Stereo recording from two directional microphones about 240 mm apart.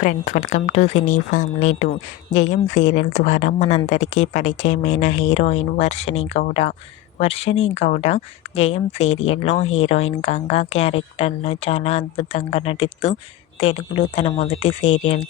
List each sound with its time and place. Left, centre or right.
0.0 s speech: left